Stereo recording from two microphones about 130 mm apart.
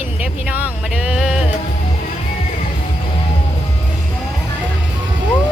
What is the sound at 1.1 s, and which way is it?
Music, 5° right (ahead or behind).